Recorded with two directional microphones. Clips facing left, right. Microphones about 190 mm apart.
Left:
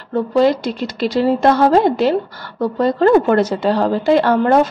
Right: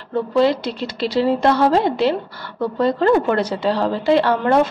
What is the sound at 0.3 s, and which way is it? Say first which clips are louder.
A woman's voice: left 2 dB; 45° left (ahead or behind).